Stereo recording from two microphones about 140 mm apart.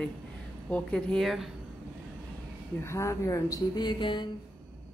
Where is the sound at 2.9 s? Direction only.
20° left (ahead or behind).